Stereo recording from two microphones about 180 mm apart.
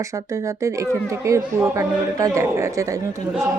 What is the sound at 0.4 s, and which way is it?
Speech, 15° right (ahead or behind).